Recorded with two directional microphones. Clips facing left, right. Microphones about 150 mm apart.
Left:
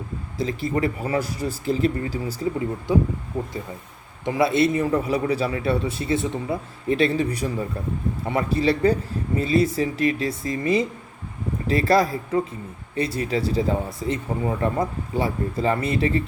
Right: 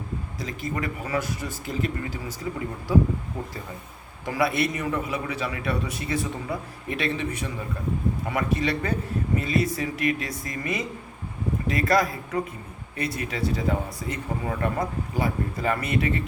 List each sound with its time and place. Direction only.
0.3 s speech: 30° left (ahead or behind)
4.3 s a man's voice: 25° left (ahead or behind)